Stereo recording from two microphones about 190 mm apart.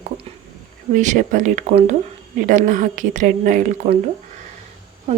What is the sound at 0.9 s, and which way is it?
A woman's voice, 40° right (ahead or behind).